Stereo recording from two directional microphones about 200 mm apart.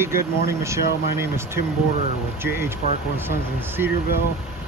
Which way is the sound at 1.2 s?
15° right (ahead or behind).